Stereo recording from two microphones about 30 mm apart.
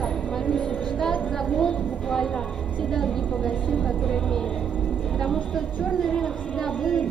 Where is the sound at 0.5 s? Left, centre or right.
Left.